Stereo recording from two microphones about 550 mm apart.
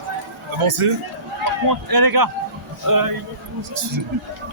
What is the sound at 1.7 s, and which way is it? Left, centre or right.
Speech, right.